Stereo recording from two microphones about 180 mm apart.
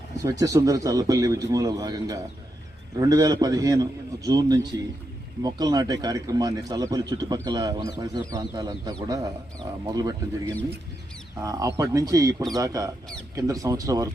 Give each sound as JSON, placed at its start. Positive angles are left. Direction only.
{"t": 0.2, "sound": "speech", "side_deg": -20}